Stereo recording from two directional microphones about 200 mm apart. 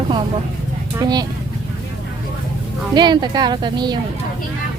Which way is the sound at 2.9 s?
20° right (ahead or behind).